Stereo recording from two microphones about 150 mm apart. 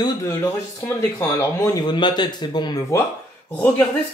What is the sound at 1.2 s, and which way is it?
Speech, 15° left (ahead or behind).